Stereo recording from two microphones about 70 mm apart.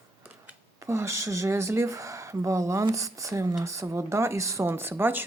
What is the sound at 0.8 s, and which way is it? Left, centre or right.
Speech, right.